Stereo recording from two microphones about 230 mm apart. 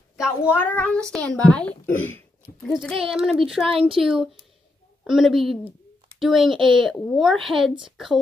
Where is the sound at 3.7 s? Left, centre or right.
Right.